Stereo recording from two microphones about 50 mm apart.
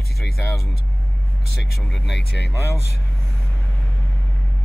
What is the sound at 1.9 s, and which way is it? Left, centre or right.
Speech, centre.